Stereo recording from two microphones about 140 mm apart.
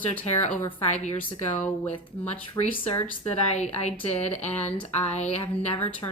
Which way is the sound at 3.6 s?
50° left (ahead or behind).